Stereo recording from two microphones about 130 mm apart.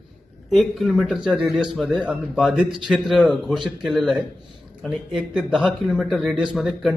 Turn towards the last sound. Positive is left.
turn(degrees=0)  # may be behind; listen again after turning